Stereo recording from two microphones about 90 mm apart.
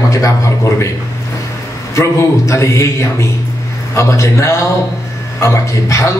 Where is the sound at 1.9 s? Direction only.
35° left (ahead or behind).